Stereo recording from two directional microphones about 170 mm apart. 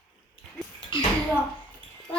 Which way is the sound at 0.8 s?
30° left (ahead or behind).